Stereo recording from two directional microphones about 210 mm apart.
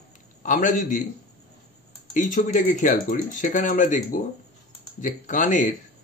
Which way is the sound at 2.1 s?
35° left (ahead or behind).